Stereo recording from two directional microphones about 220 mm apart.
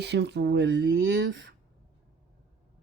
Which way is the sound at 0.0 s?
50° right (ahead or behind).